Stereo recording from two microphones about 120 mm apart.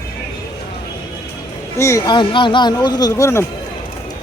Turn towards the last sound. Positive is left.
turn(degrees=20)  # may be behind; listen again after turning